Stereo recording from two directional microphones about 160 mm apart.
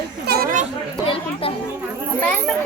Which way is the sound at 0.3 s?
65° right (ahead or behind).